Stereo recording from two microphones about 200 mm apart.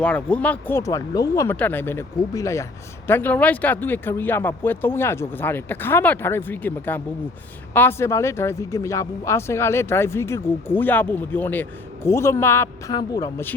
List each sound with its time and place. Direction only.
0.0 s speech: 5° left (ahead or behind)